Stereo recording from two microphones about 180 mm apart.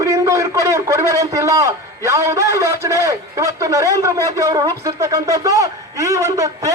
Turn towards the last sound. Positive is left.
turn(degrees=-15)  # may be behind; listen again after turning